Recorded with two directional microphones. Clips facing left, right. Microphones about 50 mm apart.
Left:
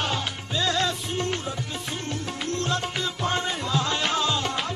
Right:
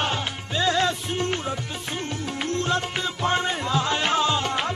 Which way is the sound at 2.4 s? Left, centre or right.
Right.